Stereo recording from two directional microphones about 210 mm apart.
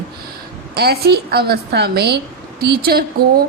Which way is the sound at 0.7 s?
50° right (ahead or behind).